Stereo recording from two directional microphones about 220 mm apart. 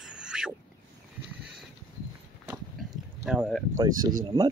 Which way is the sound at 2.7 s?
5° right (ahead or behind).